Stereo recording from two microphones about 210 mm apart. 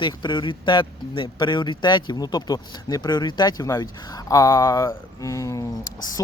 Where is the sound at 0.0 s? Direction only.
20° left (ahead or behind).